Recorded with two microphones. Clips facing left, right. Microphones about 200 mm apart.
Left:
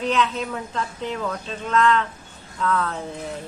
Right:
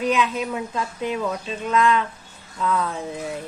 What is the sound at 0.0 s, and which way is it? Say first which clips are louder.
A woman's voice: right 1 dB; 10° right (ahead or behind).